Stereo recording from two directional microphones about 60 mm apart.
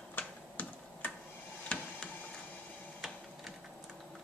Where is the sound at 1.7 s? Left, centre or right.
Centre.